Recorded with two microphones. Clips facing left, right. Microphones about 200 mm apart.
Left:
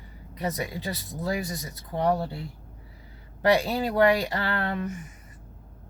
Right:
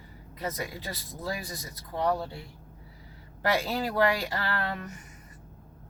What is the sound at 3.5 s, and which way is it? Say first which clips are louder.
Speech: left 1 dB; 20° left (ahead or behind).